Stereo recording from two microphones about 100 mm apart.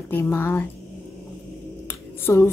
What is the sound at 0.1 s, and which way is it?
Speech, 25° left (ahead or behind).